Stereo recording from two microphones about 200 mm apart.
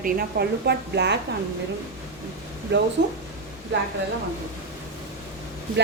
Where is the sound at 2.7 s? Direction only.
60° right (ahead or behind).